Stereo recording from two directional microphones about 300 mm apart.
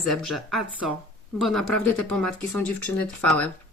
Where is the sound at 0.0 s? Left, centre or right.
Centre.